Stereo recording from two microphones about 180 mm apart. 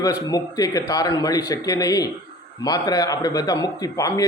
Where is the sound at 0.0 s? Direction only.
20° left (ahead or behind).